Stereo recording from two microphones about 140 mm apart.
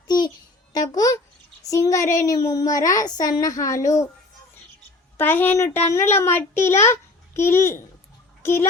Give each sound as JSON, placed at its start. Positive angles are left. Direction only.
{"t": 0.7, "sound": "music", "side_deg": 25}
{"t": 1.7, "sound": "a woman's voice", "side_deg": 20}
{"t": 5.1, "sound": "a child's voice", "side_deg": 15}